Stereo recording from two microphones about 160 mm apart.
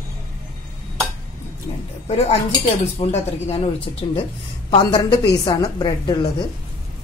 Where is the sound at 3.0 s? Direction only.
40° left (ahead or behind).